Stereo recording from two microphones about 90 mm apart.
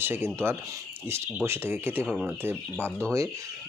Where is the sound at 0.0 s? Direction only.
25° right (ahead or behind).